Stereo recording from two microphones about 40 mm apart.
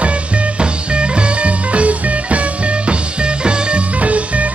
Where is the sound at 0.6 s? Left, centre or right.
Right.